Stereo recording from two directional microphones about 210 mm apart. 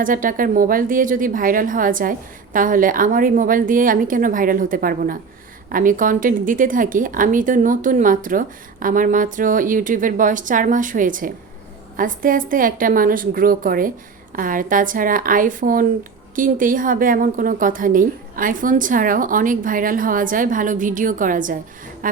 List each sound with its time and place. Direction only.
0.0 s a woman's voice: 40° right (ahead or behind)